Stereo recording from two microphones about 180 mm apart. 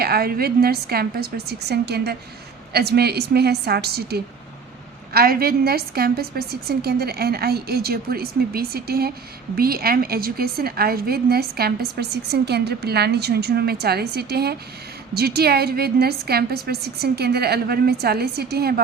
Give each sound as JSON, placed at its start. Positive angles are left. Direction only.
{"t": 0.0, "sound": "a woman's voice", "side_deg": -60}